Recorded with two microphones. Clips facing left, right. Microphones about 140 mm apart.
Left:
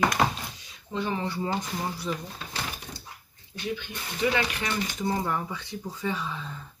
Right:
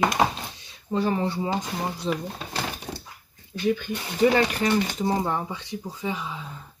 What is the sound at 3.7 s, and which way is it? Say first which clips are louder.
Speech: right 5 dB; 40° right (ahead or behind).